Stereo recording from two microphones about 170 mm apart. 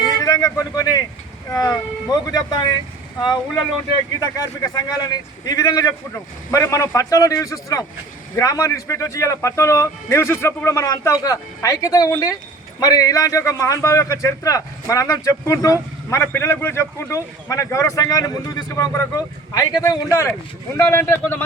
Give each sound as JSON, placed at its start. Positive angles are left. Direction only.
{"t": 0.2, "sound": "a man's voice", "side_deg": 20}